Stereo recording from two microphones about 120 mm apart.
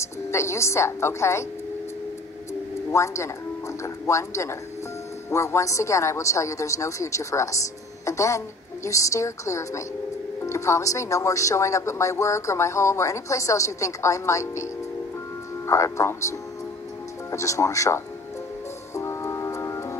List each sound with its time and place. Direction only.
0.0 s a woman's voice: 20° left (ahead or behind)
2.9 s speech: 25° left (ahead or behind)
18.9 s music: 25° left (ahead or behind)